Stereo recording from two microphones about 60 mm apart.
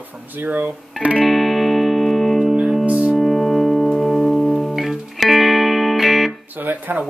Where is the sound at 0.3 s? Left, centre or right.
Right.